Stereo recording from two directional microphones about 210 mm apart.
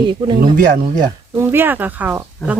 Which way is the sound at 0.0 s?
25° right (ahead or behind).